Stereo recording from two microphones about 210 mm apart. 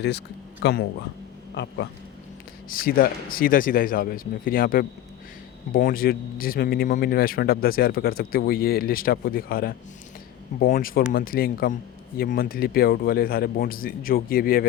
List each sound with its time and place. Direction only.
0.6 s speech: 50° left (ahead or behind)
2.6 s speech: 40° left (ahead or behind)